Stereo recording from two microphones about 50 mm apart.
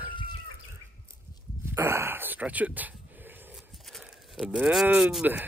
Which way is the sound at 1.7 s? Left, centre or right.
Right.